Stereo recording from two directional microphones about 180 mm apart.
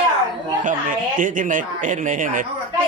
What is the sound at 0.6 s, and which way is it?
Speech, 45° right (ahead or behind).